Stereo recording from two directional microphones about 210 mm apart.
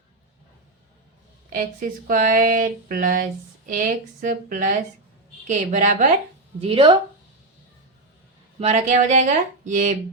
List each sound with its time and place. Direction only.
1.5 s speech: 40° right (ahead or behind)
6.6 s speech: 25° right (ahead or behind)
8.5 s speech: 30° right (ahead or behind)